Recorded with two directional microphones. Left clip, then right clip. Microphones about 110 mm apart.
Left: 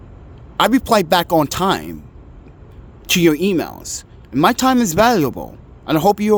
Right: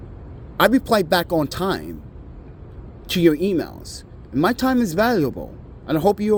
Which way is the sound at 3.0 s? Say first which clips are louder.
Left 3 dB; 45° left (ahead or behind).